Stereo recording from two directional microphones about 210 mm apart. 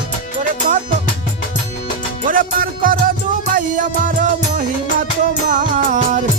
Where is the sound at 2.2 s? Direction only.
40° right (ahead or behind).